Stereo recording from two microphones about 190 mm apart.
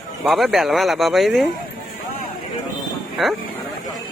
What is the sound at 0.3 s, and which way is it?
A man's voice, centre (ahead or behind).